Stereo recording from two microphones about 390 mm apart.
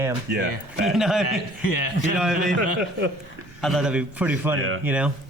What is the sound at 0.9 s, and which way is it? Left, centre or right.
Speech, centre.